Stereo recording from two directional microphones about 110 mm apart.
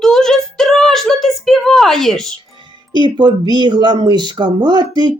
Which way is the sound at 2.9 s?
40° right (ahead or behind).